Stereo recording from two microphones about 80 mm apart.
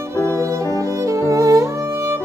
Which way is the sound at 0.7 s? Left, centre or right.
Right.